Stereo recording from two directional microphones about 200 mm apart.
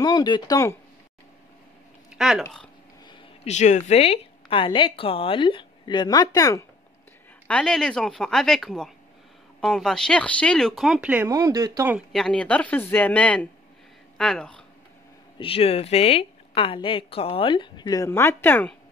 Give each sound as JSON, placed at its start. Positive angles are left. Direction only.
{"t": 0.0, "sound": "speech", "side_deg": 20}
{"t": 2.1, "sound": "speech", "side_deg": 0}
{"t": 3.4, "sound": "speech", "side_deg": 35}
{"t": 7.4, "sound": "speech", "side_deg": 5}
{"t": 12.1, "sound": "speech", "side_deg": 5}
{"t": 15.3, "sound": "speech", "side_deg": 25}